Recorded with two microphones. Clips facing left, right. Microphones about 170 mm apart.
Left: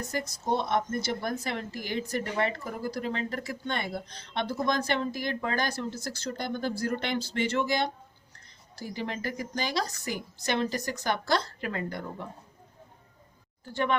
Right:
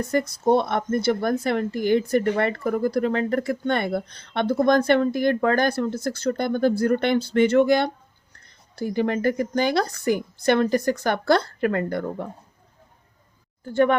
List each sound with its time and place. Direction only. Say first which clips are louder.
0.0 s speech: right 11 dB; 55° right (ahead or behind)